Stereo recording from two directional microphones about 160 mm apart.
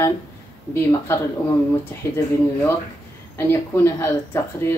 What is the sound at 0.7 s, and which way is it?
Speech, 15° left (ahead or behind).